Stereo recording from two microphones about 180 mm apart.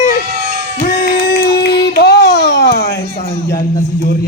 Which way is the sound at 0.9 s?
55° left (ahead or behind).